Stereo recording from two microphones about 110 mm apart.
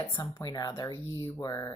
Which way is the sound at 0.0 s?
35° left (ahead or behind).